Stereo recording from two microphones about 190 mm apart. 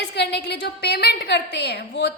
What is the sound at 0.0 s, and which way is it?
A woman's voice, 60° left (ahead or behind).